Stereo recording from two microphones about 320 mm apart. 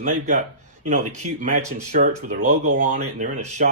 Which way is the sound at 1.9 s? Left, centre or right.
Right.